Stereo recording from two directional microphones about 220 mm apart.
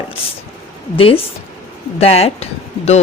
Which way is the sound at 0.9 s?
25° left (ahead or behind).